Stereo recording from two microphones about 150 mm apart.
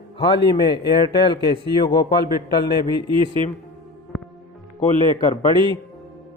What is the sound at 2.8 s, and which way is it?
Speech, 35° right (ahead or behind).